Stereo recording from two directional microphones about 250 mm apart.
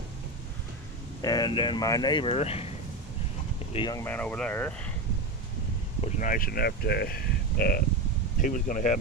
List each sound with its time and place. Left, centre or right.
1.2 s speech: centre
3.7 s speech: centre
6.0 s speech: left